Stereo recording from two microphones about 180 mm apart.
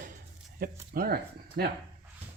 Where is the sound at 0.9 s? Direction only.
55° right (ahead or behind).